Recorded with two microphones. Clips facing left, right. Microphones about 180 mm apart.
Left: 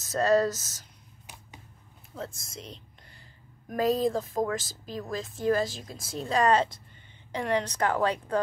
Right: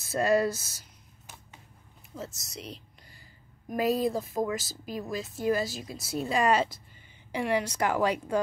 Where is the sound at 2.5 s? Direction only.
Centre (ahead or behind).